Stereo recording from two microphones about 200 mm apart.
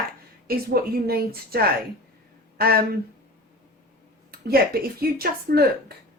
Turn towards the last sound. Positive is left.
turn(degrees=-50)  # may be behind; listen again after turning